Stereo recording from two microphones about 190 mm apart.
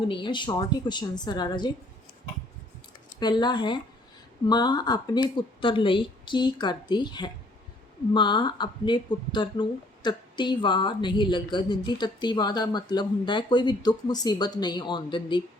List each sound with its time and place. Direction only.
0.1 s speech: 25° left (ahead or behind)
3.2 s speech: 25° left (ahead or behind)